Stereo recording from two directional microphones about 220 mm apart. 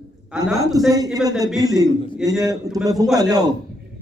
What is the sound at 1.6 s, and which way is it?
Speech, 15° right (ahead or behind).